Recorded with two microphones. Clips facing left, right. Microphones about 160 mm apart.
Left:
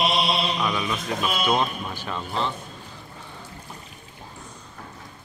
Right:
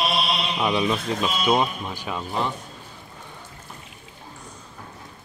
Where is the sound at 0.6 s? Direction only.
30° right (ahead or behind).